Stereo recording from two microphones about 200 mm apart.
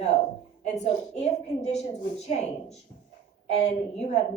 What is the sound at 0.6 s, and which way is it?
A woman's voice, 35° left (ahead or behind).